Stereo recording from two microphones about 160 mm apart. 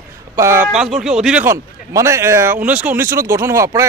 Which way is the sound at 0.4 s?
15° right (ahead or behind).